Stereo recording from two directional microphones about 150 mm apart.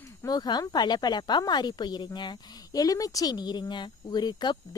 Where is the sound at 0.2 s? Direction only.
25° left (ahead or behind).